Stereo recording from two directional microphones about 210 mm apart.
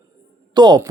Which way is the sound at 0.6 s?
20° right (ahead or behind).